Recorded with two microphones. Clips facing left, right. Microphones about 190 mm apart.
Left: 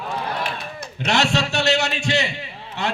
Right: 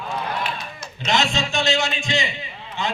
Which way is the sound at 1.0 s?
65° left (ahead or behind).